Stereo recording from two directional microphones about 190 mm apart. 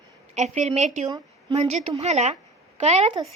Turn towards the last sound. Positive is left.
turn(degrees=-35)  # may be behind; listen again after turning